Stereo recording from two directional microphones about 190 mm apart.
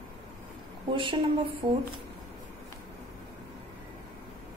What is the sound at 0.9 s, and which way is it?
Speech, 25° right (ahead or behind).